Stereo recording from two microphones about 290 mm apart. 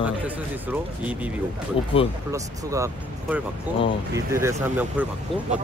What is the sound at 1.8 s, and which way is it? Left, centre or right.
Speech, centre.